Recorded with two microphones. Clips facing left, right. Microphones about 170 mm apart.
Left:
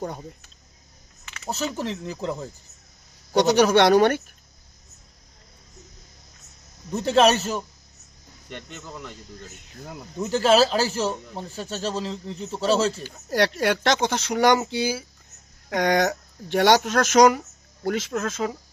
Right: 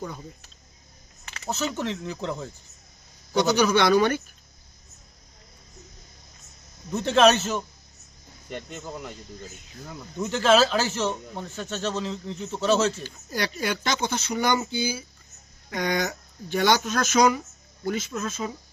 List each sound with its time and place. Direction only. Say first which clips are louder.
1.5 s speech: even; 35° left (ahead or behind)
1.9 s speech: left 1 dB; 5° left (ahead or behind)
3.3 s speech: left 4 dB; 75° left (ahead or behind)
7.0 s speech: even; 35° left (ahead or behind)
8.4 s speech: right 3 dB; 10° right (ahead or behind)
10.2 s speech: left 2 dB; 35° left (ahead or behind)
13.3 s speech: left 7 dB; 80° left